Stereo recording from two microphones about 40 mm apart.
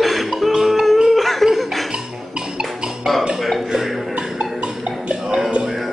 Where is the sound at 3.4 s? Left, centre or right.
Centre.